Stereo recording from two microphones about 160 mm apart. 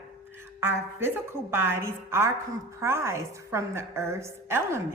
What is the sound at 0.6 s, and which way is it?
A woman's voice, 15° right (ahead or behind).